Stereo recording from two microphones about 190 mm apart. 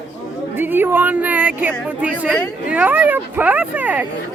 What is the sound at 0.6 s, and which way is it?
Speech, 10° right (ahead or behind).